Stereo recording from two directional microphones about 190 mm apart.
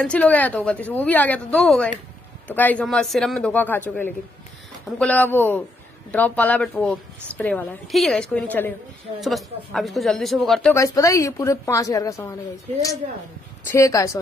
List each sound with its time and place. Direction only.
0.0 s a woman's voice: 5° left (ahead or behind)
10.7 s a woman's voice: 15° left (ahead or behind)
13.7 s a woman's voice: 15° left (ahead or behind)